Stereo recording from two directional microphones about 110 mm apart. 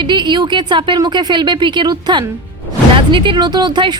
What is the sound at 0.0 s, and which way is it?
Speech, 45° right (ahead or behind).